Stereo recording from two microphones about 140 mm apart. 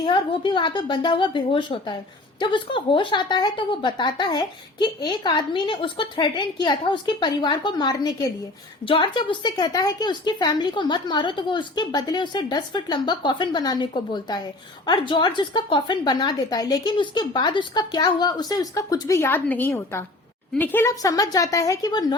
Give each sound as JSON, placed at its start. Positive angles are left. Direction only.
{"t": 0.0, "sound": "a woman's voice", "side_deg": 35}